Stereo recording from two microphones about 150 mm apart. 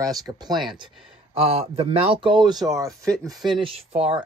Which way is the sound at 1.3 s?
40° right (ahead or behind).